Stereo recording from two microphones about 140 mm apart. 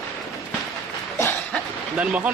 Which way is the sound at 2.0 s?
10° right (ahead or behind).